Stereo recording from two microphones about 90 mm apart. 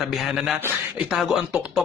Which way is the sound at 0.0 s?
Centre (ahead or behind).